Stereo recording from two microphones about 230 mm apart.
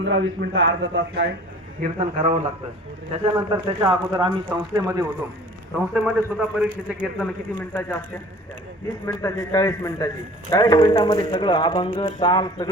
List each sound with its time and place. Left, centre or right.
0.0 s a man's voice: right
1.8 s a man's voice: right
3.1 s a man's voice: centre
7.2 s a man's voice: centre
9.2 s a man's voice: centre